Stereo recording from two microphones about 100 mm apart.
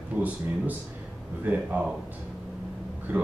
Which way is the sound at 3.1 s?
20° right (ahead or behind).